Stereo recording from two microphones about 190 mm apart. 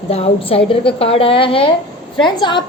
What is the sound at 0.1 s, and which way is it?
A woman's voice, 30° left (ahead or behind).